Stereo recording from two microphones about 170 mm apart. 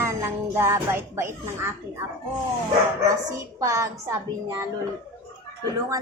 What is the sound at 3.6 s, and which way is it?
Speech, 15° right (ahead or behind).